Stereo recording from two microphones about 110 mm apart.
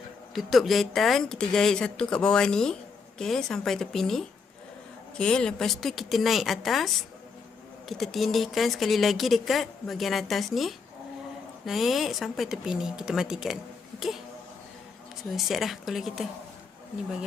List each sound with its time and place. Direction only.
0.3 s a woman's voice: centre (ahead or behind)
15.2 s a woman's voice: centre (ahead or behind)